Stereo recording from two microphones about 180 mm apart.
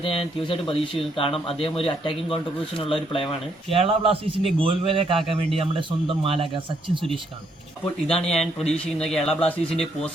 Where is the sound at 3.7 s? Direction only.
30° right (ahead or behind).